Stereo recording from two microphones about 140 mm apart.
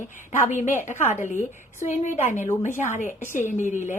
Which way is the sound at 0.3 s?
60° left (ahead or behind).